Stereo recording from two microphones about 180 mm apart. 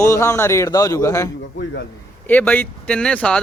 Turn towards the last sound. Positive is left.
turn(degrees=5)  # may be behind; listen again after turning